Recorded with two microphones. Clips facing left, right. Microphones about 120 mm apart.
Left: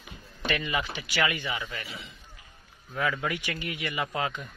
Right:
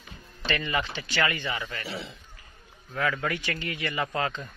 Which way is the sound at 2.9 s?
10° left (ahead or behind).